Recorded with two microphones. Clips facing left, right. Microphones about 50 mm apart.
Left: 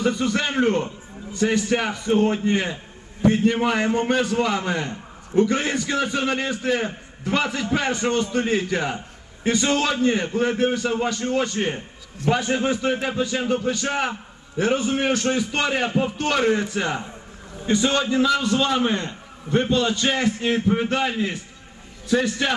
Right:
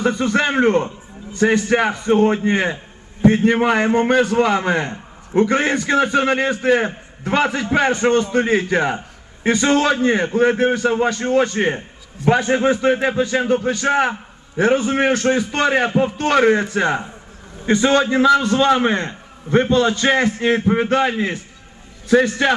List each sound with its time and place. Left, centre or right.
0.0 s a man's voice: right